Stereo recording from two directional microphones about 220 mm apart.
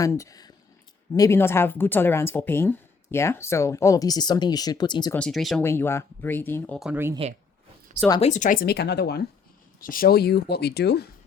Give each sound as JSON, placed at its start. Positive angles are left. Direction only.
{"t": 0.0, "sound": "speech", "side_deg": 15}
{"t": 5.1, "sound": "speech", "side_deg": 0}
{"t": 5.6, "sound": "speech", "side_deg": 10}
{"t": 8.2, "sound": "speech", "side_deg": 35}